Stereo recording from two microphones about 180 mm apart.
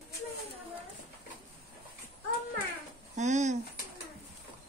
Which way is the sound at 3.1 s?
40° right (ahead or behind).